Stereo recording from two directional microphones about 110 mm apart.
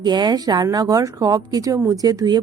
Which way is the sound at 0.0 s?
40° right (ahead or behind).